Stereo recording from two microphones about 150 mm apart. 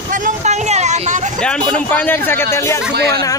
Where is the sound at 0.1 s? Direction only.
55° right (ahead or behind).